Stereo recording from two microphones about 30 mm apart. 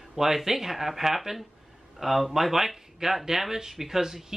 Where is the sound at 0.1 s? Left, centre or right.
Centre.